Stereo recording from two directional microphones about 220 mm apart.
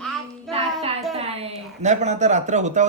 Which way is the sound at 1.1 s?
25° right (ahead or behind).